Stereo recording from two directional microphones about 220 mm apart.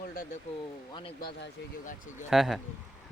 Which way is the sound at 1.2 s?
40° left (ahead or behind).